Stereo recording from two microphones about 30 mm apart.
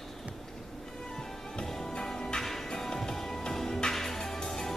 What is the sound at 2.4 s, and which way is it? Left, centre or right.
Music, centre.